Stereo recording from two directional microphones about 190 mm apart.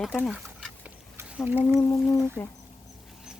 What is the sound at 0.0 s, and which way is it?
Speech, 5° right (ahead or behind).